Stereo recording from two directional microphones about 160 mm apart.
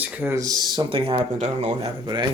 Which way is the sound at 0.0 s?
10° right (ahead or behind).